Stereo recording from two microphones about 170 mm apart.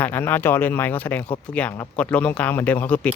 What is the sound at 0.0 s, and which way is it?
Speech, 10° left (ahead or behind).